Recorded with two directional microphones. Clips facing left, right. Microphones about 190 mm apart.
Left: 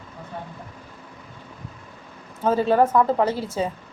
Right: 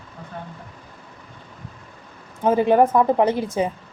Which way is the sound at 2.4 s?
15° right (ahead or behind).